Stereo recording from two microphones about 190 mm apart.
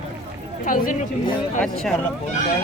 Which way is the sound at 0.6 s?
45° left (ahead or behind).